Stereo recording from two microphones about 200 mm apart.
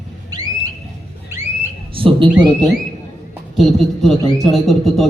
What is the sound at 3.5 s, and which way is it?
A woman's voice, centre (ahead or behind).